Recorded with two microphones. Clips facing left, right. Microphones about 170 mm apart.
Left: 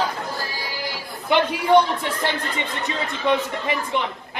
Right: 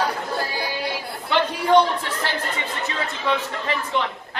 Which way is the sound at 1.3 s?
15° left (ahead or behind).